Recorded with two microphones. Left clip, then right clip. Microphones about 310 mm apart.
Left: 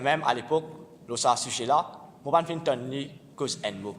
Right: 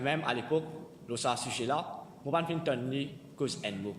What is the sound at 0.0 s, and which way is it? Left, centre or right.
A man's voice, left.